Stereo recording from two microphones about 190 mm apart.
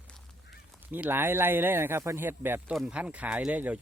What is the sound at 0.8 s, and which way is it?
Speech, 10° right (ahead or behind).